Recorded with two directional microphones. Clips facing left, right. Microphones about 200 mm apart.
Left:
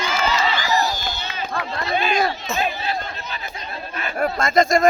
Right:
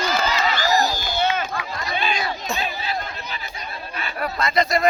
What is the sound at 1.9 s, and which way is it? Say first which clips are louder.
Chatter: left 5 dB; 50° left (ahead or behind).